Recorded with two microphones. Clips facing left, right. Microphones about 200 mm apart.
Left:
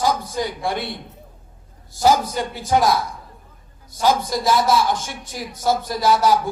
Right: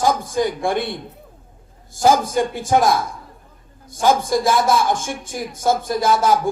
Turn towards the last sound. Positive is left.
turn(degrees=-50)  # may be behind; listen again after turning